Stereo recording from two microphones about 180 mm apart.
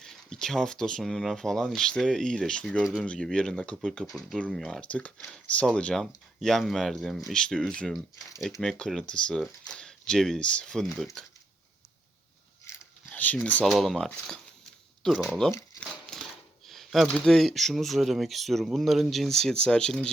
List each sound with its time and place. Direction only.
0.0 s speech: 5° left (ahead or behind)
12.7 s a sound: 15° left (ahead or behind)
13.1 s speech: 5° left (ahead or behind)
15.5 s crumpling: 5° left (ahead or behind)
16.6 s speech: centre (ahead or behind)